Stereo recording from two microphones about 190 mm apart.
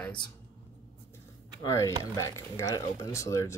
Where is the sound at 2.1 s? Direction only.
15° left (ahead or behind).